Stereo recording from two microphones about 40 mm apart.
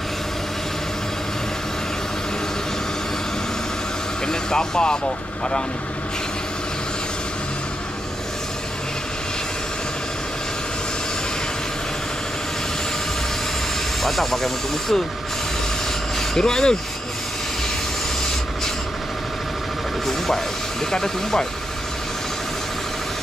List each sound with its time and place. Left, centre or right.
4.3 s speech: centre
14.0 s speech: centre
16.2 s speech: centre
20.9 s speech: centre